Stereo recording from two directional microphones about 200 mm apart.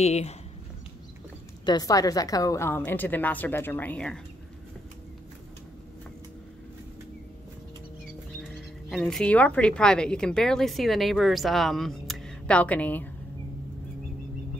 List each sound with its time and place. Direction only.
0.0 s speech: 30° left (ahead or behind)
1.7 s a woman's voice: 20° left (ahead or behind)
8.4 s speech: centre (ahead or behind)